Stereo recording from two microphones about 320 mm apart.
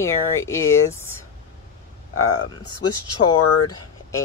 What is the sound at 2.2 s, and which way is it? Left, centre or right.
Speech, left.